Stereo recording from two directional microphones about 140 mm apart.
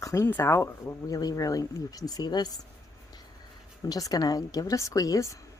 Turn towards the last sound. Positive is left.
turn(degrees=25)  # may be behind; listen again after turning